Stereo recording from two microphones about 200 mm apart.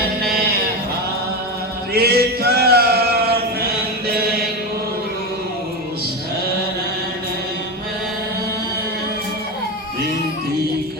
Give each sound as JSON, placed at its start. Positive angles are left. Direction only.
{"t": 0.2, "sound": "sheep", "side_deg": -50}
{"t": 1.9, "sound": "male singing", "side_deg": -50}